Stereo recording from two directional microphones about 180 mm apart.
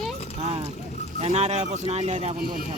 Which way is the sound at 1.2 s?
40° right (ahead or behind).